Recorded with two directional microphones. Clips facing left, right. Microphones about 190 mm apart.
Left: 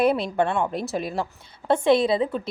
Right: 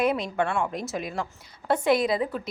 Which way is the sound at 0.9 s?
35° left (ahead or behind).